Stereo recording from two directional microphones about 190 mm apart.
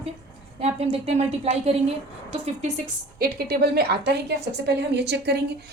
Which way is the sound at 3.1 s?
55° right (ahead or behind).